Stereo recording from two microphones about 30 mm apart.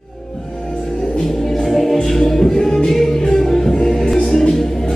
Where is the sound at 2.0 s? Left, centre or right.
Centre.